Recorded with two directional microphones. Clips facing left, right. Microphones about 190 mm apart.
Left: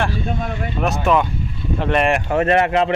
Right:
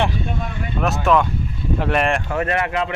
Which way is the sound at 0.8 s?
Centre (ahead or behind).